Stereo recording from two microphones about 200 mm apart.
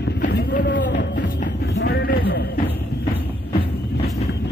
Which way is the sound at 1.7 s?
55° left (ahead or behind).